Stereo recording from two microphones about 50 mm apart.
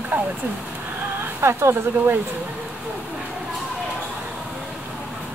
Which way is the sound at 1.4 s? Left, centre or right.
Right.